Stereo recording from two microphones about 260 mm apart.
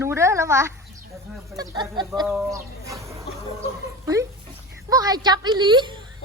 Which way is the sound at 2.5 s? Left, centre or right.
Centre.